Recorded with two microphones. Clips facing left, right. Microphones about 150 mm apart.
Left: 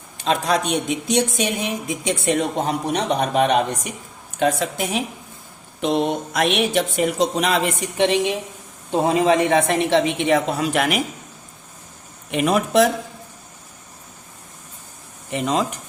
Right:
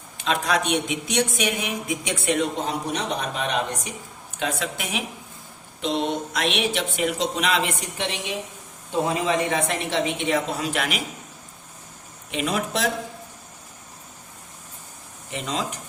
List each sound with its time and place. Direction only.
0.3 s speech: 35° left (ahead or behind)
2.4 s a woman's voice: 55° left (ahead or behind)
4.4 s speech: 45° left (ahead or behind)
5.8 s speech: 50° left (ahead or behind)
8.9 s a woman's voice: 65° left (ahead or behind)
12.3 s a woman's voice: 55° left (ahead or behind)
15.3 s a woman's voice: 55° left (ahead or behind)